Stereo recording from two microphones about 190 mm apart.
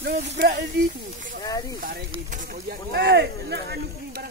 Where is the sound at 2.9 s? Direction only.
60° right (ahead or behind).